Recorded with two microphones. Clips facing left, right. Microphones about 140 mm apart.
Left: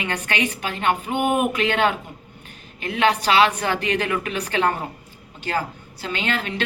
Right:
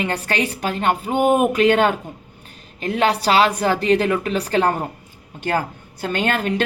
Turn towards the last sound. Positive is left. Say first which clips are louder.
# right 5 dB
turn(degrees=-45)  # may be behind; listen again after turning